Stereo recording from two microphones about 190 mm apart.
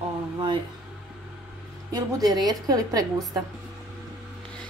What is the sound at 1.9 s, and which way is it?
A woman's voice, 20° right (ahead or behind).